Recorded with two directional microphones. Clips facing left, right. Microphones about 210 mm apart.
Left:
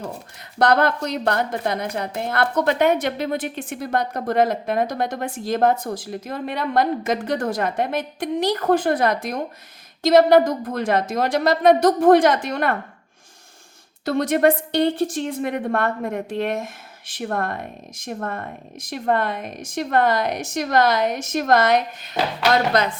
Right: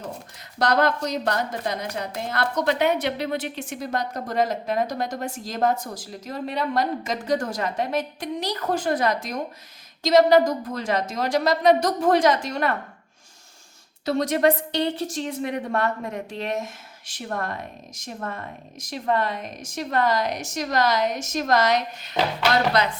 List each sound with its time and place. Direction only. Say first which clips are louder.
0.6 s a woman's voice: left 3 dB; 55° left (ahead or behind)
14.0 s a woman's voice: left 3 dB; 55° left (ahead or behind)